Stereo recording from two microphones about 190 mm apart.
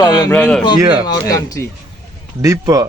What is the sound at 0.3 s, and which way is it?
Speech, 5° left (ahead or behind).